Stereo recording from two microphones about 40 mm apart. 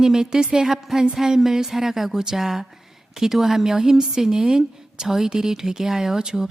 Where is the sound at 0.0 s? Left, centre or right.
Centre.